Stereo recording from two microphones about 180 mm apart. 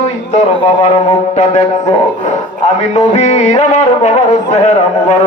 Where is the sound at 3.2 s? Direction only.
40° left (ahead or behind).